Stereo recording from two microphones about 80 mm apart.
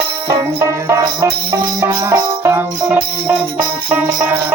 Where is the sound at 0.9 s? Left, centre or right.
Right.